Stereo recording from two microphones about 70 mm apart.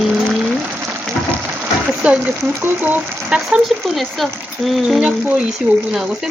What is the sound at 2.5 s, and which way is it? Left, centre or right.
Speech, right.